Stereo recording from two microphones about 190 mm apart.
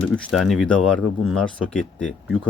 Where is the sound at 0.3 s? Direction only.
Centre (ahead or behind).